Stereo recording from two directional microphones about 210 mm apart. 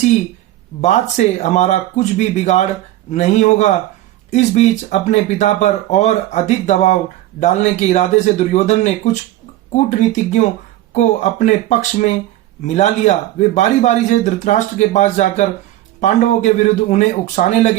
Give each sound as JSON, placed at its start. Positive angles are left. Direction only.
{"t": 0.8, "sound": "a man's voice", "side_deg": 35}